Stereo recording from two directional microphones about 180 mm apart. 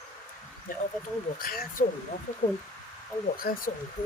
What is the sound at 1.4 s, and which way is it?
Speech, 55° left (ahead or behind).